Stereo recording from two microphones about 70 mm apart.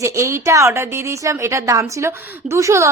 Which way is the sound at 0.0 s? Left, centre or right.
Right.